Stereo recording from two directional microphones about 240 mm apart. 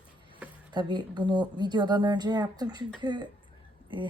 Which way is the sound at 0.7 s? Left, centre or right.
Centre.